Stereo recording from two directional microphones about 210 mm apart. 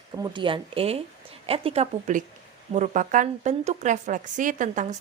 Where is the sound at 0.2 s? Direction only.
25° right (ahead or behind).